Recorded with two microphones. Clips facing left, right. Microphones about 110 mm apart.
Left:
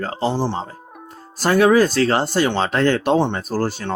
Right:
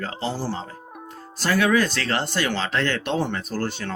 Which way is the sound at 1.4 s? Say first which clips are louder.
Left 6 dB; 40° left (ahead or behind).